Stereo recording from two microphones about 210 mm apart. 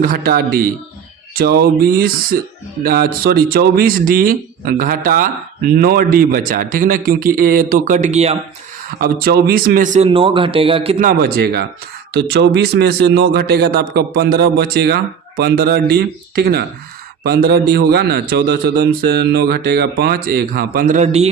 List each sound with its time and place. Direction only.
0.0 s speech: 45° right (ahead or behind)
9.0 s speech: 45° right (ahead or behind)
10.1 s speech: 25° right (ahead or behind)
10.9 s speech: 40° right (ahead or behind)